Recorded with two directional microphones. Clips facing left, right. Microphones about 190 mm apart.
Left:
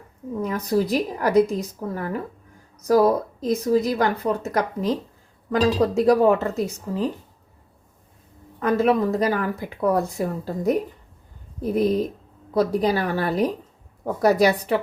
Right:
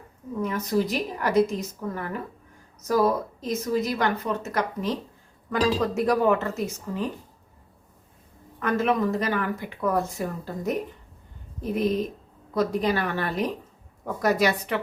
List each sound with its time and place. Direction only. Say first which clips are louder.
0.4 s speech: left 3 dB; 35° left (ahead or behind)
8.5 s speech: left 4 dB; 35° left (ahead or behind)